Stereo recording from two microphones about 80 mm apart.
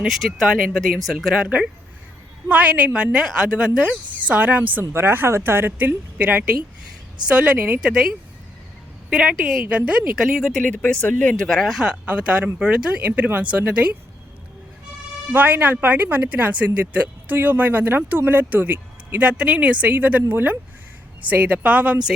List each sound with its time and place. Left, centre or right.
0.1 s speech: centre
10.5 s speech: centre
11.4 s speech: centre
15.3 s speech: right